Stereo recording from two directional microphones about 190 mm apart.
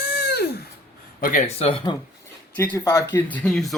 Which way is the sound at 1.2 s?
45° left (ahead or behind).